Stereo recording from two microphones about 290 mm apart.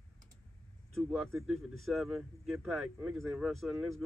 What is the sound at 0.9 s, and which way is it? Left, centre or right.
Speech, centre.